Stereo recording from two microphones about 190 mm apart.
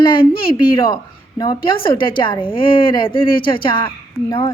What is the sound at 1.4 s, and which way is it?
A woman's voice, 25° left (ahead or behind).